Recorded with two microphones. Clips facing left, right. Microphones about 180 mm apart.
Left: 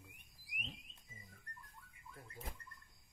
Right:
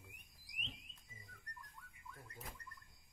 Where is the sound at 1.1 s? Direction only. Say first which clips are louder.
Left 2 dB; 30° left (ahead or behind).